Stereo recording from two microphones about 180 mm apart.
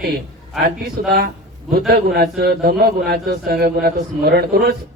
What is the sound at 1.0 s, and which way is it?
A man's voice, 55° right (ahead or behind).